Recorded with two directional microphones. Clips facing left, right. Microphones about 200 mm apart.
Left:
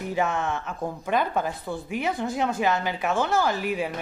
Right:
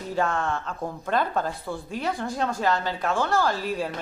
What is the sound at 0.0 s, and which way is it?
A woman's voice, 15° left (ahead or behind).